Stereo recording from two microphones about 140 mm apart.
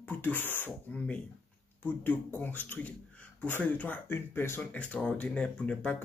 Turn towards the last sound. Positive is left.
turn(degrees=10)  # may be behind; listen again after turning